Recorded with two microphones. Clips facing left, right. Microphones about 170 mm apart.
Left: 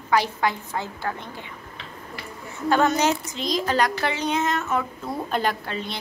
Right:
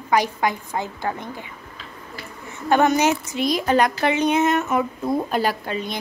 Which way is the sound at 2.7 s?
15° right (ahead or behind).